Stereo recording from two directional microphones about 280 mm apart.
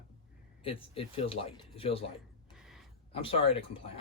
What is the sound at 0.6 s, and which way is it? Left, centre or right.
A man's voice, centre.